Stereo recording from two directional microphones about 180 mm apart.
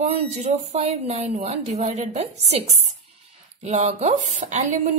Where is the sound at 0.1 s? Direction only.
40° right (ahead or behind).